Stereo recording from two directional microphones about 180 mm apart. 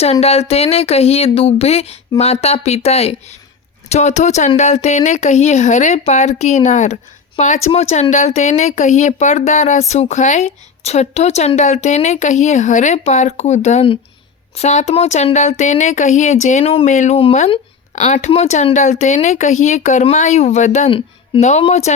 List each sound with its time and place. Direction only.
0.0 s speech: 35° left (ahead or behind)